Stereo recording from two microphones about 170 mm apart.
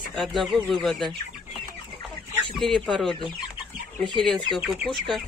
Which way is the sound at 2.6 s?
Centre (ahead or behind).